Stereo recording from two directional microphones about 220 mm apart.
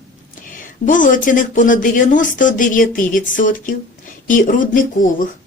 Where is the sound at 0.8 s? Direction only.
35° left (ahead or behind).